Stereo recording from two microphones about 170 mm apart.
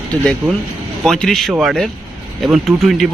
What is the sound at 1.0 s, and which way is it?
Speech, centre (ahead or behind).